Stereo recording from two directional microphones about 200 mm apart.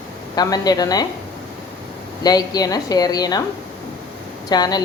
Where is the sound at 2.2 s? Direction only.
20° left (ahead or behind).